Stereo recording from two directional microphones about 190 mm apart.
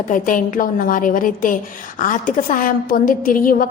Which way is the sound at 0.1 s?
45° left (ahead or behind).